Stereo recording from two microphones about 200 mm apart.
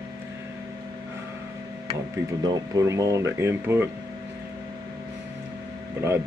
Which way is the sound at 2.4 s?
20° right (ahead or behind).